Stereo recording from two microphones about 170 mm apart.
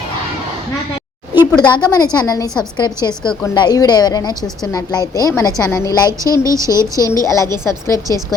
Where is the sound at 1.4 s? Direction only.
25° left (ahead or behind).